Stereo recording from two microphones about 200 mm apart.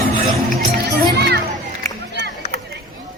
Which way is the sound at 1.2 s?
55° right (ahead or behind).